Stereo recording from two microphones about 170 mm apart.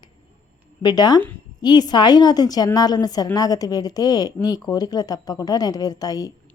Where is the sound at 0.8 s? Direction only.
25° left (ahead or behind).